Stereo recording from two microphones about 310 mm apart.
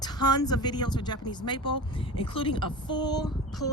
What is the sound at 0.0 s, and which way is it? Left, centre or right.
Speech, centre.